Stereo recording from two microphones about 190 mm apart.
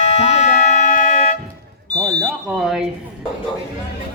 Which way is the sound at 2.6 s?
Centre (ahead or behind).